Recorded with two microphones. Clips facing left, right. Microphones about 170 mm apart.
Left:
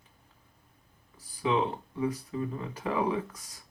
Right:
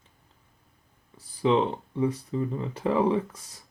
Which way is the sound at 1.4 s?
30° right (ahead or behind).